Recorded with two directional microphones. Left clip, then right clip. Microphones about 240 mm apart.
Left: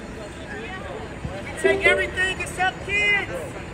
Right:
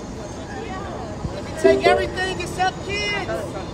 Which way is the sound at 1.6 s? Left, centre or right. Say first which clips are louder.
Right 3 dB; right.